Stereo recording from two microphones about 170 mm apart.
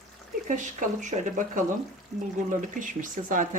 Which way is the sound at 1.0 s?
45° right (ahead or behind).